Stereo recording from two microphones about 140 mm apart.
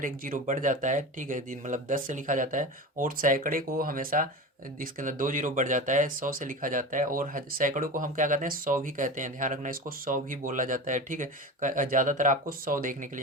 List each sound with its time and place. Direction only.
0.0 s speech: 75° right (ahead or behind)